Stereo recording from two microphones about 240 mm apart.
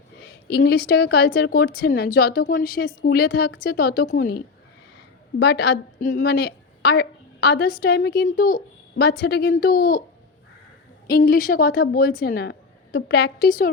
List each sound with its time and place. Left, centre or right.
0.2 s a woman's voice: left
11.2 s a woman's voice: left